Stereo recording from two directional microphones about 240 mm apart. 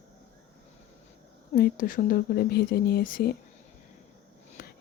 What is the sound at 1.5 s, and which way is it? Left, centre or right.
Speech, left.